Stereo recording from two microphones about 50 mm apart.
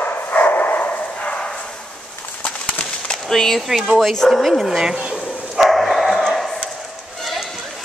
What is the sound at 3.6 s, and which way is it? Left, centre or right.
Speech, centre.